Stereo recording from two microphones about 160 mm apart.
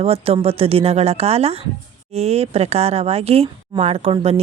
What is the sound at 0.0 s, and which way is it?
Speech, 40° right (ahead or behind).